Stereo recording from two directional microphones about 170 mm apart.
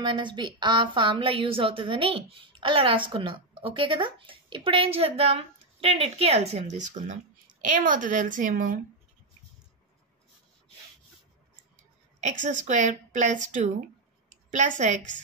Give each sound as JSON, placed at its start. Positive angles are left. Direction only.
{"t": 0.0, "sound": "a woman's voice", "side_deg": -30}
{"t": 12.2, "sound": "speech", "side_deg": -45}